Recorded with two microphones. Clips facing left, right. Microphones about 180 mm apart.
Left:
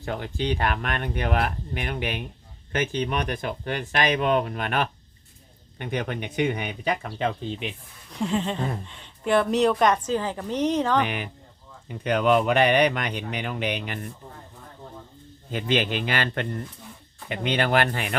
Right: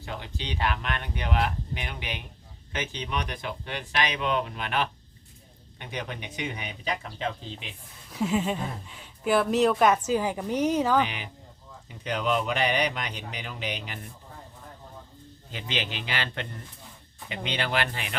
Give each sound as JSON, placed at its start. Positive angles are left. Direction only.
{"t": 0.0, "sound": "speech", "side_deg": 50}
{"t": 8.1, "sound": "a woman's voice", "side_deg": -5}
{"t": 11.0, "sound": "speech", "side_deg": 55}
{"t": 15.5, "sound": "speech", "side_deg": 50}